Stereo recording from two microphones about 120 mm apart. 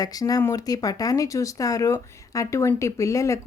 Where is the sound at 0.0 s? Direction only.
30° left (ahead or behind).